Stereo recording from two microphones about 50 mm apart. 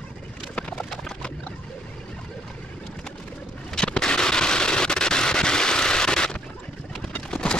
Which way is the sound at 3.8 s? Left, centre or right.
Centre.